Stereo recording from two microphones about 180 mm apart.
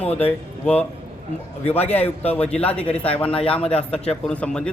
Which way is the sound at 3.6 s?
35° left (ahead or behind).